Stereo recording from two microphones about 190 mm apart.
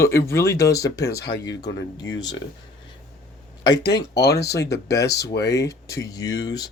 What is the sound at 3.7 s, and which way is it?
Speech, 65° left (ahead or behind).